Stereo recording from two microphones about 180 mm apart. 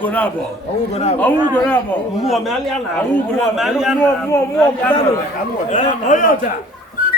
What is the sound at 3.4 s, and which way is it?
Speech, centre (ahead or behind).